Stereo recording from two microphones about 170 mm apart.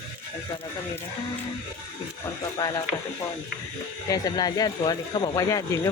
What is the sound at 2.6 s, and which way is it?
Speech, 15° left (ahead or behind).